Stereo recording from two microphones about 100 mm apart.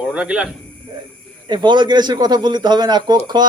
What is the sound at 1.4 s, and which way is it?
A man's voice, 50° right (ahead or behind).